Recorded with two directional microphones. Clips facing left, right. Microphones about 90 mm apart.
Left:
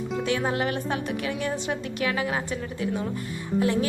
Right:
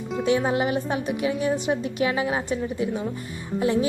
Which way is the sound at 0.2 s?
20° right (ahead or behind).